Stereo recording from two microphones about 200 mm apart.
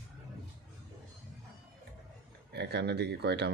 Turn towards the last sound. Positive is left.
turn(degrees=-55)  # may be behind; listen again after turning